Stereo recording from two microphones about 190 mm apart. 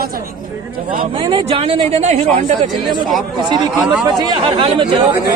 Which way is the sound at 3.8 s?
Centre (ahead or behind).